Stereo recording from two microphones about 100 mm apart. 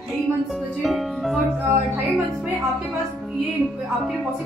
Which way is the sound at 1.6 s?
20° right (ahead or behind).